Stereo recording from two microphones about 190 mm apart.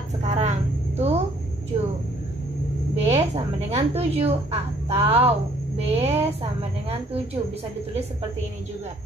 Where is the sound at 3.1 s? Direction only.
35° right (ahead or behind).